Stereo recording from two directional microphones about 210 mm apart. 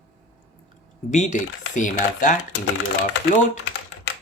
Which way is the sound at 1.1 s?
35° left (ahead or behind).